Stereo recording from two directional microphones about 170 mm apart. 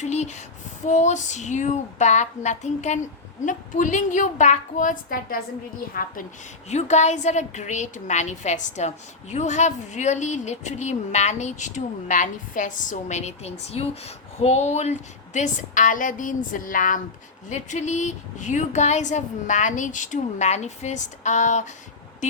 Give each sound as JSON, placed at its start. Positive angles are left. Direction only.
{"t": 0.0, "sound": "a woman's voice", "side_deg": 40}
{"t": 6.7, "sound": "speech", "side_deg": 40}